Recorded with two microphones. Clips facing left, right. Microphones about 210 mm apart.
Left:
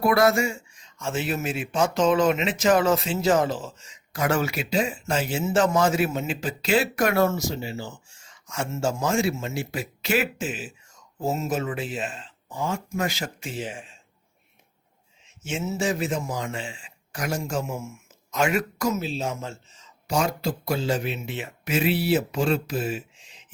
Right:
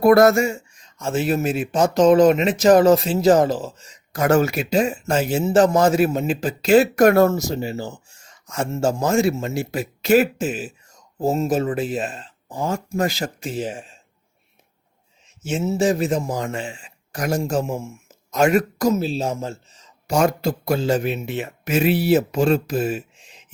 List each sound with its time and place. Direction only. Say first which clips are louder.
0.0 s speech: right 7 dB; 45° right (ahead or behind)
15.4 s speech: right 7 dB; 35° right (ahead or behind)
20.1 s speech: right 6 dB; 45° right (ahead or behind)